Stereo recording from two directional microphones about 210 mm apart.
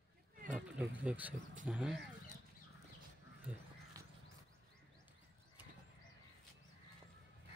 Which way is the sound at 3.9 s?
15° right (ahead or behind).